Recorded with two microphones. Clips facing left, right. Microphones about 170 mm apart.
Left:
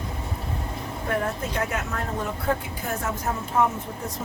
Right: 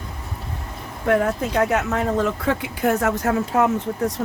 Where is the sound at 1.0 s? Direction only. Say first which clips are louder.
Right 8 dB; 80° right.